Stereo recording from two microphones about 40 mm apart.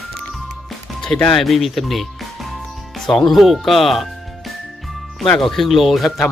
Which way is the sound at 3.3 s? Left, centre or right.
Centre.